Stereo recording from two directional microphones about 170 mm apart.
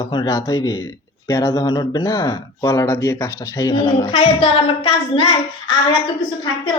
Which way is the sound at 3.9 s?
30° left (ahead or behind).